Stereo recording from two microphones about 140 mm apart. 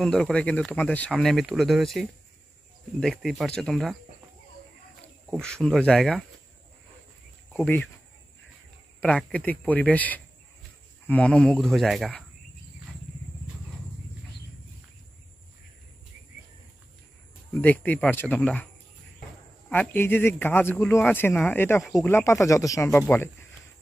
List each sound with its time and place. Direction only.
0.0 s speech: 5° left (ahead or behind)
5.3 s speech: 5° left (ahead or behind)
7.5 s speech: 15° left (ahead or behind)
9.0 s speech: 10° left (ahead or behind)
17.6 s speech: 10° left (ahead or behind)
19.7 s speech: 15° left (ahead or behind)